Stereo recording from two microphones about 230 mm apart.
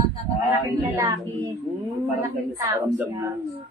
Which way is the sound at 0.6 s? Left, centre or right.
Centre.